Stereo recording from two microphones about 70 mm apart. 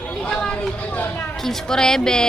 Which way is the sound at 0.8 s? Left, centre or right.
Left.